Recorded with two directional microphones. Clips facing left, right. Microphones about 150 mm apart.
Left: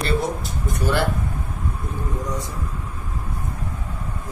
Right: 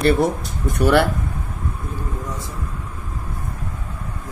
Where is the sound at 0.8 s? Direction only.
65° right (ahead or behind).